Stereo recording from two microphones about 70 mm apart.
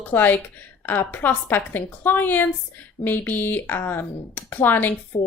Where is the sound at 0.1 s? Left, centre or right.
Left.